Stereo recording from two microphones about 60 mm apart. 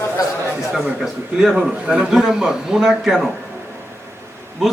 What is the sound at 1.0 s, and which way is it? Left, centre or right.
A man's voice, centre.